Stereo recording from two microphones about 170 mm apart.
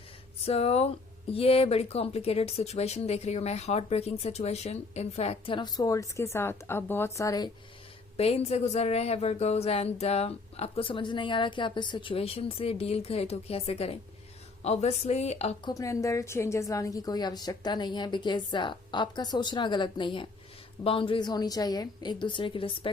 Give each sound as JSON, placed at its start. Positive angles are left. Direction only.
{"t": 0.4, "sound": "speech", "side_deg": 35}
{"t": 8.1, "sound": "speech", "side_deg": 35}
{"t": 15.6, "sound": "a woman's voice", "side_deg": 20}